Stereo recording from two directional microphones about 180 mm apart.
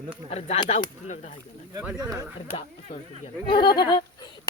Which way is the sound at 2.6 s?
35° left (ahead or behind).